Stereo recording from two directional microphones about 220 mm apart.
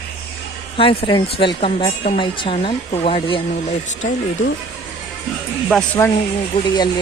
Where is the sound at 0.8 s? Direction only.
25° left (ahead or behind).